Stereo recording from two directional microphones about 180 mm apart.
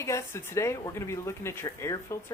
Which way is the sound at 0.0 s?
15° left (ahead or behind).